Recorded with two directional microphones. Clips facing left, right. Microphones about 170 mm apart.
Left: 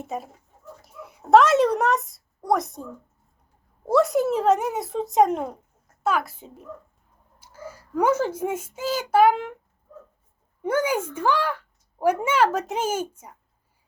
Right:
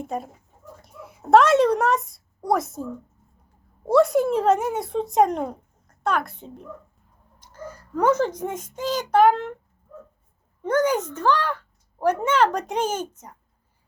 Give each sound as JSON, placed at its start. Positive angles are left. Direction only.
{"t": 0.0, "sound": "a child's voice", "side_deg": 0}
{"t": 3.8, "sound": "a child's voice", "side_deg": 0}
{"t": 10.6, "sound": "speech", "side_deg": 10}